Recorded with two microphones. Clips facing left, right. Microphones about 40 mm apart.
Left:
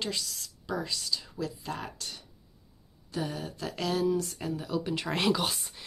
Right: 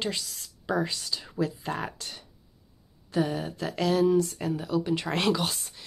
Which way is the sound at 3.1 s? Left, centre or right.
Centre.